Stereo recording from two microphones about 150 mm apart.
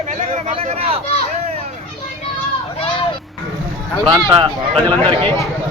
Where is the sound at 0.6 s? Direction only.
40° right (ahead or behind).